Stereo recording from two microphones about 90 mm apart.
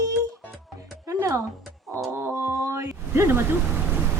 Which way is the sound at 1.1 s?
35° right (ahead or behind).